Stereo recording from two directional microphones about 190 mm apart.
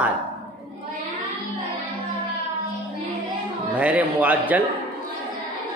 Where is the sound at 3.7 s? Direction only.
5° right (ahead or behind).